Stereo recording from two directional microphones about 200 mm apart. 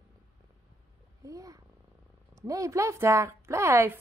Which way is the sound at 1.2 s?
15° right (ahead or behind).